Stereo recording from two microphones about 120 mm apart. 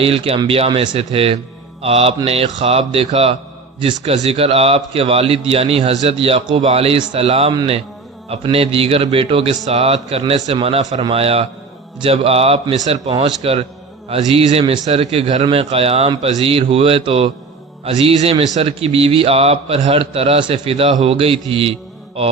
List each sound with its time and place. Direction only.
0.0 s a man's voice: 50° right (ahead or behind)
6.1 s a man's voice: 50° right (ahead or behind)
9.6 s a man's voice: 60° right (ahead or behind)
12.7 s a man's voice: 65° right (ahead or behind)